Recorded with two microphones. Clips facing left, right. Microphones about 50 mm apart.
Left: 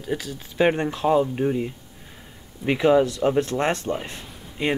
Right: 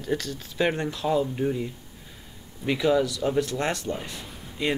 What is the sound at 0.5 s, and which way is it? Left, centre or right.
Speech, left.